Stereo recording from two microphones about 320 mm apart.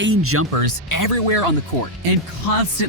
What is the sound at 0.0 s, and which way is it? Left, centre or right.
Speech, right.